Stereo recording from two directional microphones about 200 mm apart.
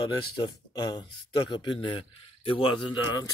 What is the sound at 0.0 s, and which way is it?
Speech, 20° left (ahead or behind).